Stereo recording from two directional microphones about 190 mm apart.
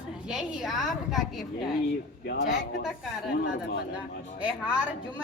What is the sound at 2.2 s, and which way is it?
Speech, 50° left (ahead or behind).